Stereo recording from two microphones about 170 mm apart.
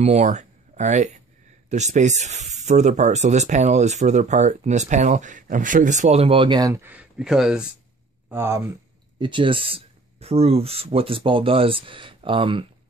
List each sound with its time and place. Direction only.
0.0 s speech: 40° right (ahead or behind)
6.7 s speech: 10° right (ahead or behind)
8.3 s speech: 15° right (ahead or behind)
9.2 s speech: 30° right (ahead or behind)